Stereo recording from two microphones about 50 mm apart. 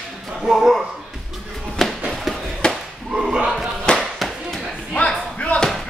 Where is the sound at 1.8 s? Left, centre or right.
Centre.